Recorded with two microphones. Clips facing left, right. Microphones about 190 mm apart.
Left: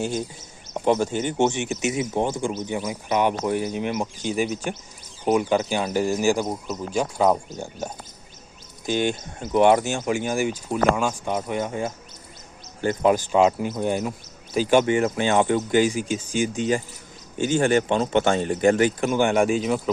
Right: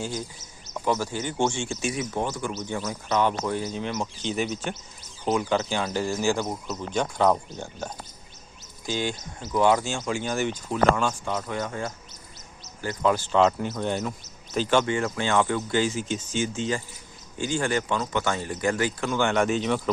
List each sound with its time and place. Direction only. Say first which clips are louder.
0.0 s speech: left 5 dB; 20° left (ahead or behind)
8.9 s speech: left 5 dB; 20° left (ahead or behind)